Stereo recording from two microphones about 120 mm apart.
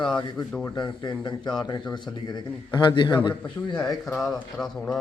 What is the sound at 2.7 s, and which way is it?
Speech, 40° left (ahead or behind).